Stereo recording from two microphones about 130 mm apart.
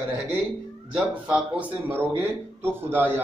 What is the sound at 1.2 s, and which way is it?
A man's voice, 10° right (ahead or behind).